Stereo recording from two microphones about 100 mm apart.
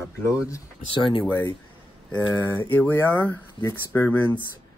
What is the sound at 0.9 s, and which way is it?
Speech, 55° left (ahead or behind).